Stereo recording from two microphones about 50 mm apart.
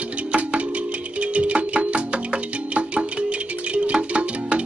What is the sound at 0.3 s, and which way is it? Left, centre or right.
Music, right.